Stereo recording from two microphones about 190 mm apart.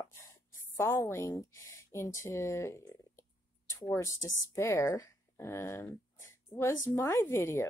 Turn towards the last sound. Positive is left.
turn(degrees=15)  # may be behind; listen again after turning